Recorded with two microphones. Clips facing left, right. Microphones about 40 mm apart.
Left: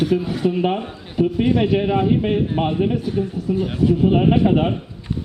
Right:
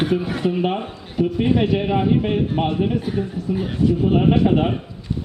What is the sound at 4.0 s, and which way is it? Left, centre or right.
Speech, centre.